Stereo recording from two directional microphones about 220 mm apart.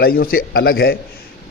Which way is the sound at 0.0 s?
40° left (ahead or behind).